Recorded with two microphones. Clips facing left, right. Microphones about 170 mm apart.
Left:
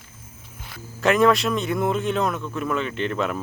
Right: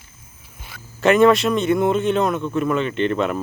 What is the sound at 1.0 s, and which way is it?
Speech, centre (ahead or behind).